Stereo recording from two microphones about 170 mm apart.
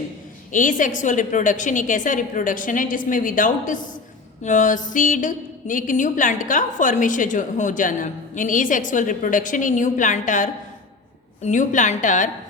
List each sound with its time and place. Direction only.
0.5 s a woman's voice: 50° left (ahead or behind)